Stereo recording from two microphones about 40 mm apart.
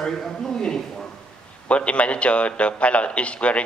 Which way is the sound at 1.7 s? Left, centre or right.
Left.